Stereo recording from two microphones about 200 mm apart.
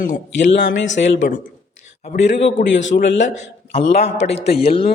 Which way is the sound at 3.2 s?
35° left (ahead or behind).